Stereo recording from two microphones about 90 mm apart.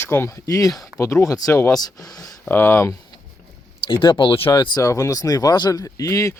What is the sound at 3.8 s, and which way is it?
Speech, 65° left (ahead or behind).